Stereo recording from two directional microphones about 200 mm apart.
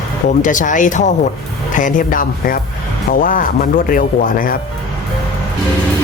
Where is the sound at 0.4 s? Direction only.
40° left (ahead or behind).